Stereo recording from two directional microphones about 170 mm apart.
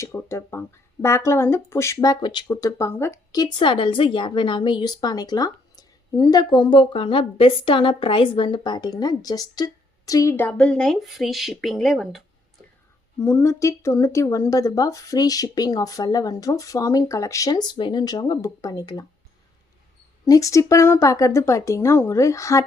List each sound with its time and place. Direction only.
0.0 s speech: 15° left (ahead or behind)
13.1 s speech: 15° left (ahead or behind)
20.2 s a woman's voice: 20° left (ahead or behind)